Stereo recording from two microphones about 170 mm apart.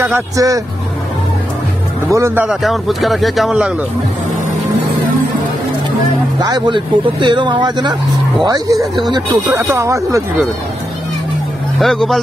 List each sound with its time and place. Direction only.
0.0 s speech: 15° right (ahead or behind)
2.0 s a man's voice: 15° right (ahead or behind)
6.4 s speech: 25° right (ahead or behind)
8.7 s a man's voice: centre (ahead or behind)
9.3 s speech: 15° right (ahead or behind)
11.8 s a man's voice: centre (ahead or behind)